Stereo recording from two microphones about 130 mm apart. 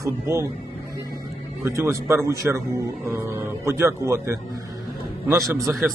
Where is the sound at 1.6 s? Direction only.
20° right (ahead or behind).